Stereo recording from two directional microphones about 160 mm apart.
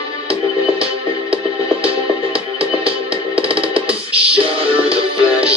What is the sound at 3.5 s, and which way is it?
Music, 35° right (ahead or behind).